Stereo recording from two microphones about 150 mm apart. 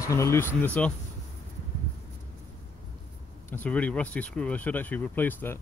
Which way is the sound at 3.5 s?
10° left (ahead or behind).